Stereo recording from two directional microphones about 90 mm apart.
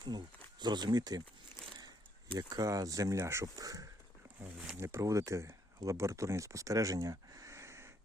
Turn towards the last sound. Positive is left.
turn(degrees=-30)  # may be behind; listen again after turning